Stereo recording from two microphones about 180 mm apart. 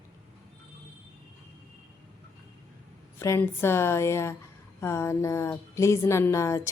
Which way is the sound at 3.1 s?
15° left (ahead or behind).